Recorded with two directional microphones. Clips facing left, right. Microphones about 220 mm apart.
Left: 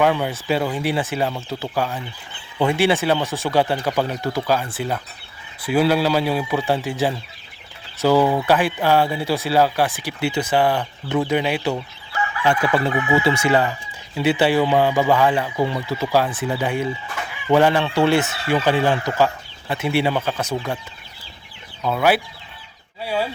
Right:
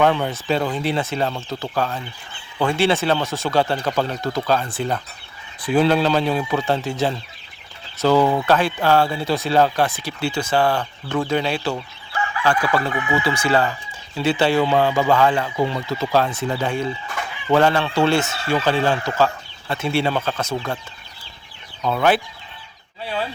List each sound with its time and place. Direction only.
0.0 s speech: 10° left (ahead or behind)
8.0 s speech: 10° left (ahead or behind)
21.8 s speech: 10° left (ahead or behind)